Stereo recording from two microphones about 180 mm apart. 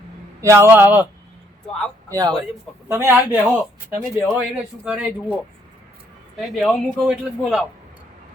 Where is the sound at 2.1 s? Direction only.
20° right (ahead or behind).